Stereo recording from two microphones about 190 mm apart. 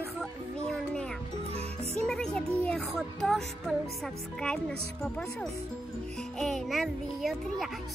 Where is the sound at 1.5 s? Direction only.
30° right (ahead or behind).